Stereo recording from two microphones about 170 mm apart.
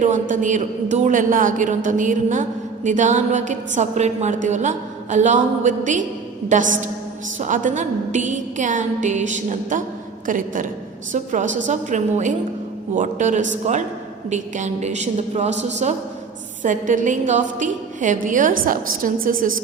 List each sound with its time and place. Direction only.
0.0 s a woman's voice: 50° right (ahead or behind)